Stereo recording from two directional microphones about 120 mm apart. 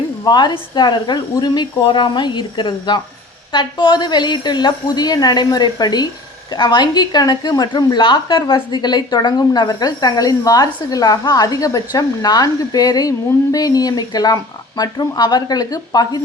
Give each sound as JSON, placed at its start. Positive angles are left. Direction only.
{"t": 0.3, "sound": "a woman's voice", "side_deg": 35}